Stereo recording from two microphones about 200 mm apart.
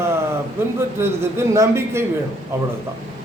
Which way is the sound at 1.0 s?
15° right (ahead or behind).